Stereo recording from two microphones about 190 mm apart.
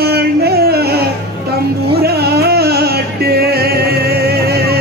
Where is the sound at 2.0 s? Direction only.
55° right (ahead or behind).